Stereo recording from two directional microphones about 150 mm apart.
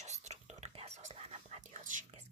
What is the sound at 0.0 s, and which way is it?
Whispering, 50° right (ahead or behind).